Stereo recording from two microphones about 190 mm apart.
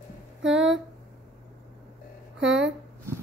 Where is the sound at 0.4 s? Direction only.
75° right (ahead or behind).